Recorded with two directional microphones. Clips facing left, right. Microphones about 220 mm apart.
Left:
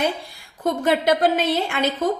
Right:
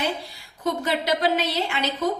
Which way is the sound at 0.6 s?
50° left (ahead or behind).